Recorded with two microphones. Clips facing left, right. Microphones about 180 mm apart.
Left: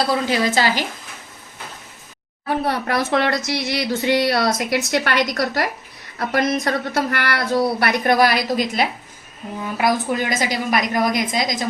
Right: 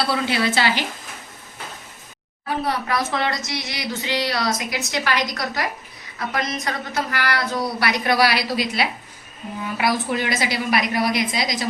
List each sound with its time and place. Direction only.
0.1 s a woman's voice: 40° left (ahead or behind)
2.5 s a woman's voice: 60° left (ahead or behind)